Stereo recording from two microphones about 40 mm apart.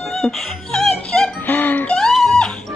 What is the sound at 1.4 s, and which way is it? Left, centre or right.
Music, left.